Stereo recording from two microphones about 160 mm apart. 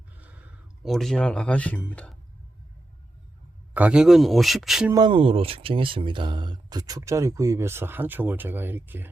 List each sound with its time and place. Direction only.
0.8 s speech: centre (ahead or behind)
3.8 s speech: 5° right (ahead or behind)
4.9 s speech: 25° right (ahead or behind)